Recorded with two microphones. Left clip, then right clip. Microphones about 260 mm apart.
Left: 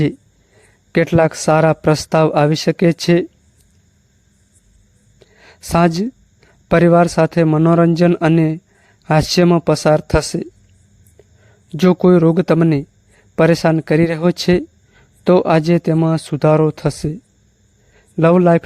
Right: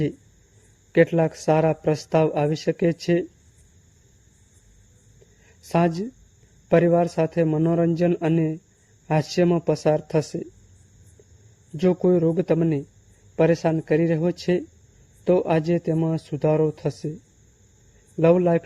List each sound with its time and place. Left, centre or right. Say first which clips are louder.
0.9 s speech: left 5 dB; left
5.5 s speech: left 7 dB; left
11.8 s speech: left 8 dB; left
18.2 s speech: left 6 dB; left